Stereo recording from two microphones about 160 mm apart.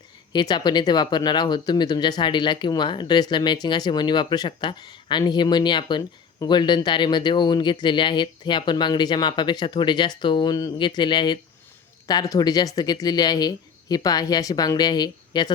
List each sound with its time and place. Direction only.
0.3 s speech: 25° left (ahead or behind)